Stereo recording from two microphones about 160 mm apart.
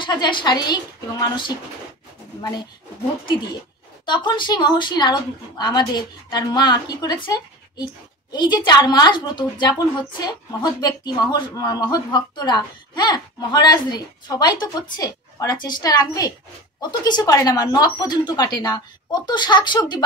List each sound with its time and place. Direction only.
0.0 s speech: 30° left (ahead or behind)
4.0 s speech: 30° left (ahead or behind)